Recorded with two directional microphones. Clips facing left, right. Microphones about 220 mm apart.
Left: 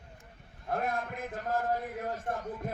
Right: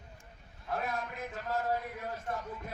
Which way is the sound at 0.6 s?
50° left (ahead or behind).